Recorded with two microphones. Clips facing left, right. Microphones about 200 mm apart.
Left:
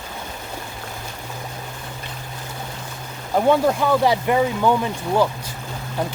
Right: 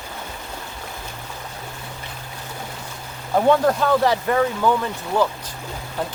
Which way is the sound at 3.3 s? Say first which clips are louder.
Even; 10° left (ahead or behind).